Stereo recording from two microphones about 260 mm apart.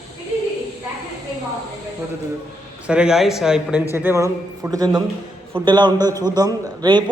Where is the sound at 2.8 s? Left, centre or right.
Centre.